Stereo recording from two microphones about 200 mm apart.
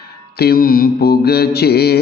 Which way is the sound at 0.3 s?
50° left (ahead or behind).